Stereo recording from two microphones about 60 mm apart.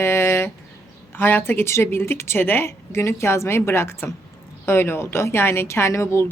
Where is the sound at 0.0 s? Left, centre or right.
Left.